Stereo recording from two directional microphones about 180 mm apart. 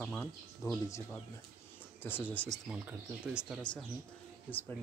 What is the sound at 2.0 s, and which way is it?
Speech, 10° left (ahead or behind).